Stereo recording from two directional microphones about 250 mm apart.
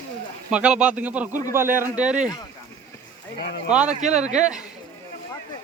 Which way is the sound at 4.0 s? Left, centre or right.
Right.